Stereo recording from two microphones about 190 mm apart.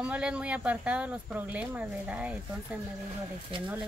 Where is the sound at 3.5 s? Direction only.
25° right (ahead or behind).